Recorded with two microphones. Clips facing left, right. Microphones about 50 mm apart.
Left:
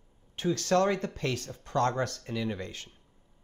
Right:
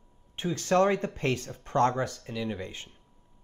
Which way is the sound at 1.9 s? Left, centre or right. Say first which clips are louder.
Even; centre.